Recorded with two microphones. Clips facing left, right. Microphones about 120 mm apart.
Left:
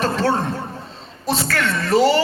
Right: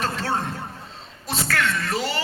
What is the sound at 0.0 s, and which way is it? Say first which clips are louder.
A man's voice: left 6 dB; 30° left (ahead or behind).